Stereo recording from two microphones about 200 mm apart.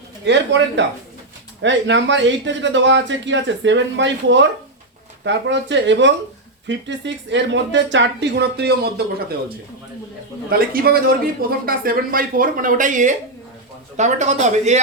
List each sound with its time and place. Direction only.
0.3 s speech: 65° right (ahead or behind)
10.5 s speech: 45° right (ahead or behind)